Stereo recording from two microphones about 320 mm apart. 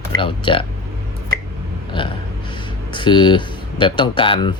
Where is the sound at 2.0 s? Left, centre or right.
Centre.